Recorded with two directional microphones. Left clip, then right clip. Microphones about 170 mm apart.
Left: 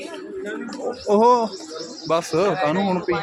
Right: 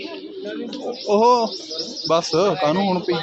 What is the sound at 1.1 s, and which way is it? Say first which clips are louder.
Speech: even; 25° left (ahead or behind).